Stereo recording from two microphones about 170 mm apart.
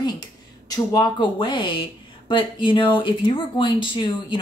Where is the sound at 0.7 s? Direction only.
20° left (ahead or behind).